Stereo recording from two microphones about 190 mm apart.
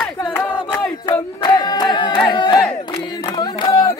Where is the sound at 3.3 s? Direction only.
20° left (ahead or behind).